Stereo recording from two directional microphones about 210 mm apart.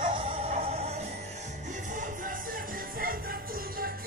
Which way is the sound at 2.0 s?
40° right (ahead or behind).